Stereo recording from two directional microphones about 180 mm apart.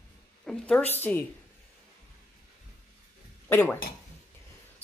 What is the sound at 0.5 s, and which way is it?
Speech, 5° left (ahead or behind).